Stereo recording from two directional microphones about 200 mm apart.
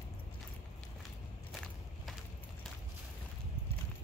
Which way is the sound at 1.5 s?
Centre (ahead or behind).